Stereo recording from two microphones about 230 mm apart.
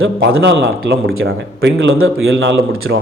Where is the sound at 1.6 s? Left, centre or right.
Right.